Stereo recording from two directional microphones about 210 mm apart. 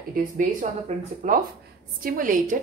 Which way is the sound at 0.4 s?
35° right (ahead or behind).